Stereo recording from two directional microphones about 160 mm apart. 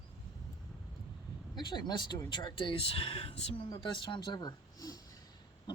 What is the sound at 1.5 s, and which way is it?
Speech, 30° left (ahead or behind).